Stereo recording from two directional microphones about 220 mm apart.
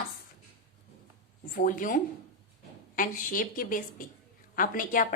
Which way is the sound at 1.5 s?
40° left (ahead or behind).